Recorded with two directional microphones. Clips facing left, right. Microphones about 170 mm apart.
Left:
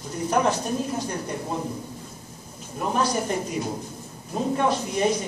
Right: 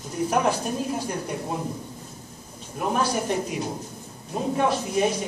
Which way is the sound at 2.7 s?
5° right (ahead or behind).